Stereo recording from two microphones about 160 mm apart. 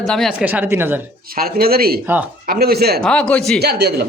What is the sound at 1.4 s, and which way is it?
Speech, 70° right (ahead or behind).